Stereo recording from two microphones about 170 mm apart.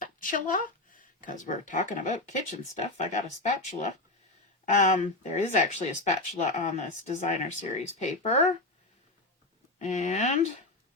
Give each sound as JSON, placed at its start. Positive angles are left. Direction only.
{"t": 0.0, "sound": "speech", "side_deg": 55}
{"t": 9.7, "sound": "speech", "side_deg": 45}